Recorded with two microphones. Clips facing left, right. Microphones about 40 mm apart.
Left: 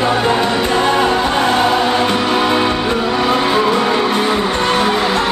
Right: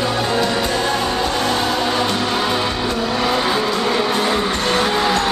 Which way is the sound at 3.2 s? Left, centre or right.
Centre.